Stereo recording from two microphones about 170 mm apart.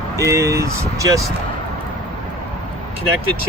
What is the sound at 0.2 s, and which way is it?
Speech, 20° right (ahead or behind).